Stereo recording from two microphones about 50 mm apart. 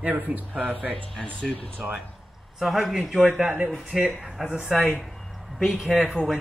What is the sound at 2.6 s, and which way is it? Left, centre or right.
Speech, centre.